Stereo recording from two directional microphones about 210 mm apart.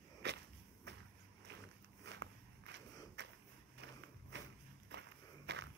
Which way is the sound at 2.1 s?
55° right (ahead or behind).